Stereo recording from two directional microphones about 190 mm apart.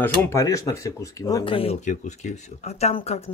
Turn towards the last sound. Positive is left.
turn(degrees=30)  # may be behind; listen again after turning